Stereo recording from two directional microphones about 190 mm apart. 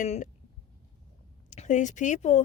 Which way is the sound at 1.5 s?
40° left (ahead or behind).